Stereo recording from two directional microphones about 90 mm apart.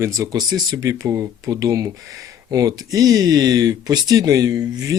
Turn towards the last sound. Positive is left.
turn(degrees=-45)  # may be behind; listen again after turning